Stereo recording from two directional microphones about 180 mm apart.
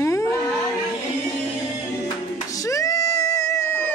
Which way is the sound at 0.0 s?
15° left (ahead or behind).